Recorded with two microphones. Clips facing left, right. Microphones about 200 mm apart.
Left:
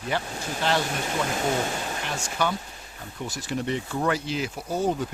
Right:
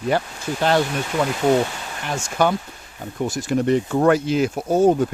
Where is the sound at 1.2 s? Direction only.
50° right (ahead or behind).